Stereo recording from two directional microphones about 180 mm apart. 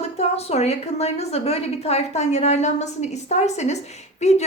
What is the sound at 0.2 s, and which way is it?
A woman's voice, 35° left (ahead or behind).